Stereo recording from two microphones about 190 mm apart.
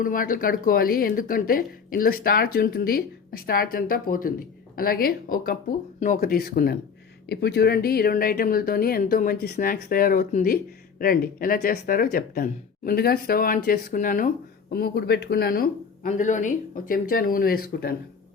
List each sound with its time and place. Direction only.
0.0 s speech: 45° left (ahead or behind)